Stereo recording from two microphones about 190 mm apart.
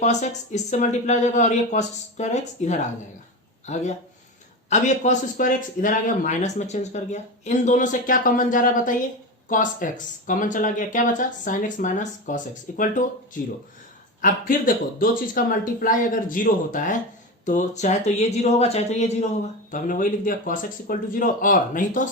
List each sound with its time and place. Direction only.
0.0 s speech: 40° left (ahead or behind)
14.2 s speech: 45° left (ahead or behind)